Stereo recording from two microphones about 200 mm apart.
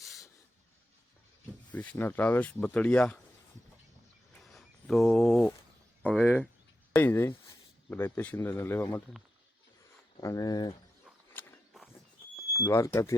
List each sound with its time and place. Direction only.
0.0 s a sound: centre (ahead or behind)
1.7 s speech: 5° left (ahead or behind)
4.4 s a sound: centre (ahead or behind)
6.0 s speech: 5° left (ahead or behind)
10.2 s speech: 15° left (ahead or behind)
11.3 s mechanisms: 10° left (ahead or behind)
12.6 s speech: 15° left (ahead or behind)